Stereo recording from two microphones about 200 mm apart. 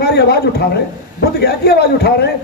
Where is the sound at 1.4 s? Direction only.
55° left (ahead or behind).